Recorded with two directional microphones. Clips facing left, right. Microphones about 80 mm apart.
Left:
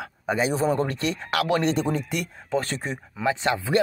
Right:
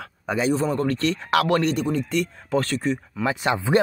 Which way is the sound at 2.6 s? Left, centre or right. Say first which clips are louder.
Right 6 dB; left.